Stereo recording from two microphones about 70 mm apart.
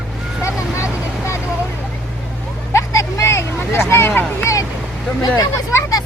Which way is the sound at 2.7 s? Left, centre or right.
Left.